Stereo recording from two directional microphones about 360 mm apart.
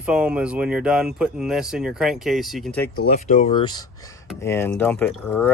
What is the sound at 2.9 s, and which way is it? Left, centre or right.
Speech, left.